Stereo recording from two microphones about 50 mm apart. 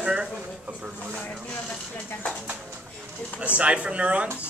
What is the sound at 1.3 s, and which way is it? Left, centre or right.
Speech, left.